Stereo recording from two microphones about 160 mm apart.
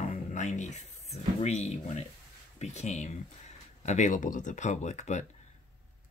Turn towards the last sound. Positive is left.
turn(degrees=45)  # may be behind; listen again after turning